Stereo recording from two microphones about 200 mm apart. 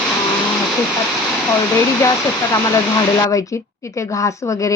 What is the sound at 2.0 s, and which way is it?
A woman's voice, 15° left (ahead or behind).